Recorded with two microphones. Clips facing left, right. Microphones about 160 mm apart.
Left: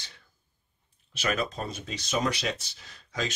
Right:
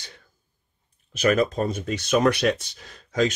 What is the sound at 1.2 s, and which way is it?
Speech, 50° right (ahead or behind).